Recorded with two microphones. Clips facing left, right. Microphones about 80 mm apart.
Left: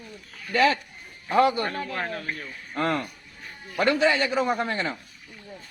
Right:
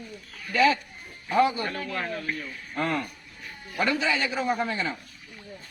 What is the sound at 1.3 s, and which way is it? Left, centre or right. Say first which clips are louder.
Speech: left 2 dB; left.